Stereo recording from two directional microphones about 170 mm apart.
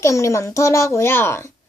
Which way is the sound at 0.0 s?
15° left (ahead or behind).